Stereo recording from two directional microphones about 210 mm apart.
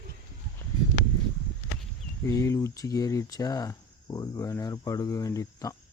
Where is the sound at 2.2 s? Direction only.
15° left (ahead or behind).